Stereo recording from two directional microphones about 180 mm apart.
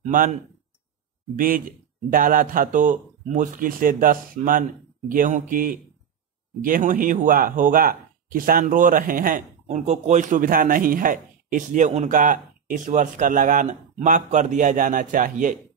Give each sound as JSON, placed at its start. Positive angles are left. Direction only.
{"t": 0.1, "sound": "speech", "side_deg": -45}